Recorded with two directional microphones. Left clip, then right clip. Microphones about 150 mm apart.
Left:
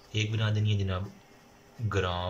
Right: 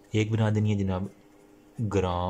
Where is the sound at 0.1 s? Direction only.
50° right (ahead or behind).